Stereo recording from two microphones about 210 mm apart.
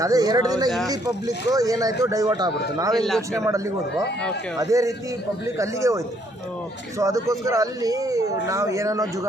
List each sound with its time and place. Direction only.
0.0 s speech: 15° right (ahead or behind)
2.9 s a man's voice: centre (ahead or behind)
4.6 s speech: 15° right (ahead or behind)
7.0 s speech: 15° right (ahead or behind)